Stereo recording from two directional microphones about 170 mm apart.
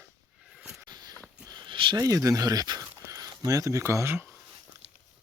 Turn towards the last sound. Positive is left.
turn(degrees=-15)  # may be behind; listen again after turning